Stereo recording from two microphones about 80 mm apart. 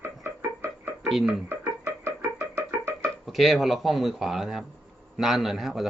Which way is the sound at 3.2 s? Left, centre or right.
Centre.